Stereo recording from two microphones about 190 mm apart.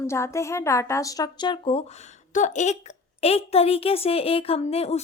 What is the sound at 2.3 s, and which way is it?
A woman's voice, 40° left (ahead or behind).